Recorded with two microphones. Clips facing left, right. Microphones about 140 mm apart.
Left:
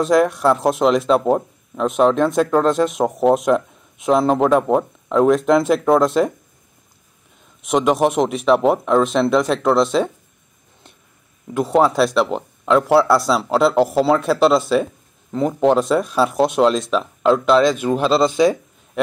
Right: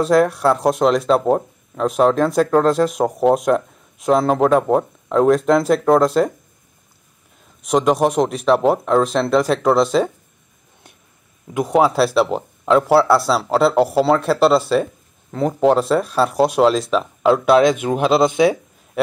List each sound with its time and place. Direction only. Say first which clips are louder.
0.0 s speech: even; centre (ahead or behind)
7.6 s speech: even; centre (ahead or behind)
11.7 s speech: even; 5° right (ahead or behind)